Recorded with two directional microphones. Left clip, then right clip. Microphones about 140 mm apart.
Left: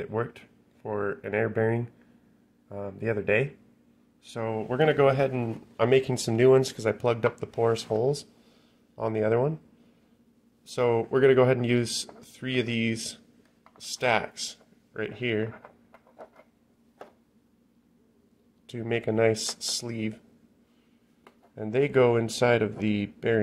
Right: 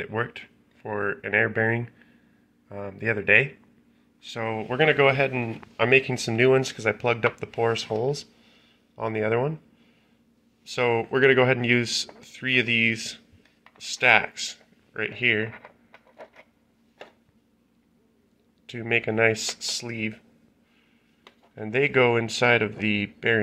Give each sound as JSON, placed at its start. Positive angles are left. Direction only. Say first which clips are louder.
{"t": 0.0, "sound": "speech", "louder": "right 2 dB", "side_deg": 10}
{"t": 2.9, "sound": "speech", "louder": "right 6 dB", "side_deg": 20}
{"t": 10.7, "sound": "speech", "louder": "right 1 dB", "side_deg": 20}
{"t": 18.7, "sound": "speech", "louder": "right 4 dB", "side_deg": 20}
{"t": 21.5, "sound": "speech", "louder": "right 2 dB", "side_deg": 15}